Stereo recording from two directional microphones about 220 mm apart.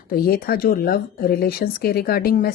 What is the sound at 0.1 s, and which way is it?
A woman's voice, 40° left (ahead or behind).